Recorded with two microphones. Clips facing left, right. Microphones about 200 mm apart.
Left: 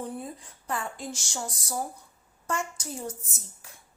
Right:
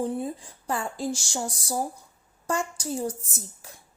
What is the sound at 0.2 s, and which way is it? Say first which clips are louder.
Speech: right 7 dB; 30° right (ahead or behind).